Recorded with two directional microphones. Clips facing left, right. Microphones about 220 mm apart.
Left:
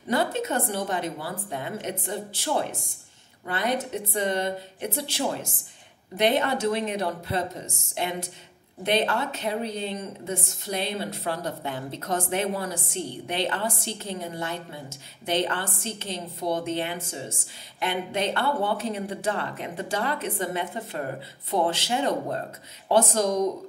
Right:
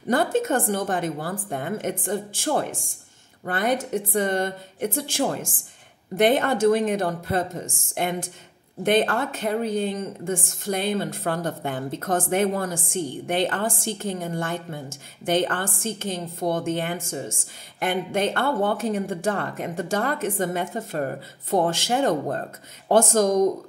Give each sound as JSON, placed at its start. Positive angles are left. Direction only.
{"t": 0.1, "sound": "a woman's voice", "side_deg": -50}